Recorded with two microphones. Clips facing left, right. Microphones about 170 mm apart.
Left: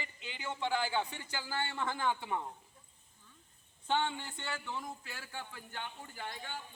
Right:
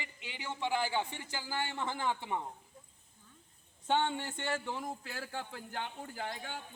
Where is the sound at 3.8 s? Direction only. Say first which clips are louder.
Right 2 dB; 50° right (ahead or behind).